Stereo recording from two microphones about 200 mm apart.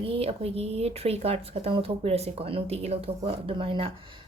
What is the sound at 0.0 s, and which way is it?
Speech, 30° right (ahead or behind).